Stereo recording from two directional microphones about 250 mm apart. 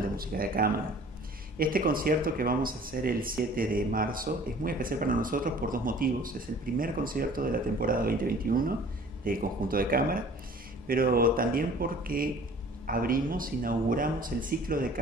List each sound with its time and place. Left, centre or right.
0.2 s speech: right